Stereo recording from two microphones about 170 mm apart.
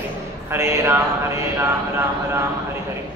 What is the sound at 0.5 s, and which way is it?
Speech, 15° right (ahead or behind).